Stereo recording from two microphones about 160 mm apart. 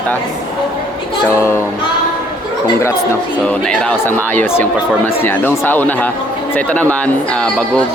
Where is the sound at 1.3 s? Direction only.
15° left (ahead or behind).